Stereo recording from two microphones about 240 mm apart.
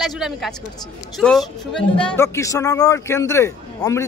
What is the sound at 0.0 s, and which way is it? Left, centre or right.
Speech, centre.